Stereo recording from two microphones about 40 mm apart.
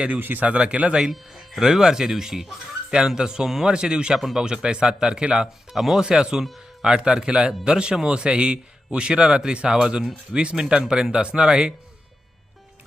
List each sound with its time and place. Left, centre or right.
0.1 s speech: right
0.4 s speech: right
1.1 s speech: centre
1.6 s speech: centre
4.1 s speech: centre
4.4 s speech: centre
5.7 s speech: centre
6.0 s speech: centre